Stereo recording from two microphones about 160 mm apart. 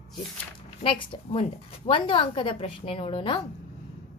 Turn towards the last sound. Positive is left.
turn(degrees=35)  # may be behind; listen again after turning